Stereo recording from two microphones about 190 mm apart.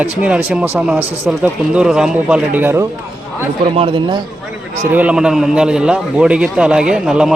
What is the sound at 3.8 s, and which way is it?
Speech, 25° right (ahead or behind).